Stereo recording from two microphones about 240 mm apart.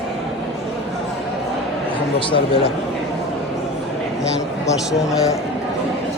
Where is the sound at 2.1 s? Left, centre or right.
Left.